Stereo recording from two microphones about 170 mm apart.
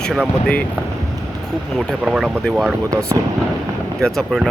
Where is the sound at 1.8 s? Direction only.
5° right (ahead or behind).